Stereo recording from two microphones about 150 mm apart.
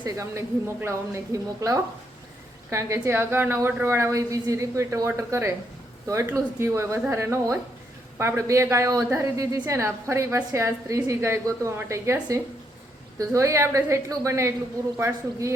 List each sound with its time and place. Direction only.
0.0 s a woman's voice: 20° right (ahead or behind)